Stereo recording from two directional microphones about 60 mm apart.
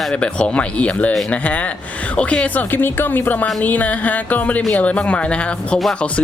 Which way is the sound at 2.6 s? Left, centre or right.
Left.